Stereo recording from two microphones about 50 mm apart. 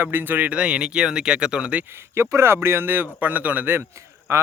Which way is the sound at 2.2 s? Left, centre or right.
Right.